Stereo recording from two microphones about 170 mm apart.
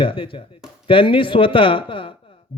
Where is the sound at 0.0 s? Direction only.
30° left (ahead or behind).